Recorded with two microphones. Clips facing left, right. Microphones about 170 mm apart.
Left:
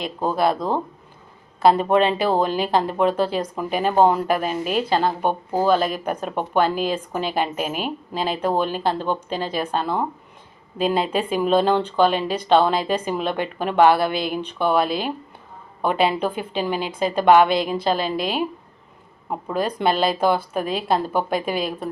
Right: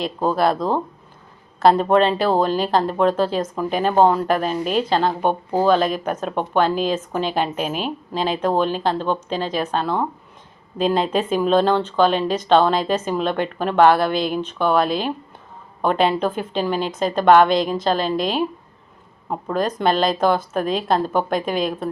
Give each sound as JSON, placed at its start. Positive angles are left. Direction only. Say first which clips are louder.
{"t": 0.2, "sound": "speech", "louder": "right 1 dB", "side_deg": 10}
{"t": 1.6, "sound": "speech", "louder": "right 1 dB", "side_deg": 5}
{"t": 5.3, "sound": "speech", "louder": "right 2 dB", "side_deg": -15}
{"t": 5.6, "sound": "speech", "louder": "right 2 dB", "side_deg": 5}
{"t": 19.5, "sound": "speech", "louder": "right 1 dB", "side_deg": 10}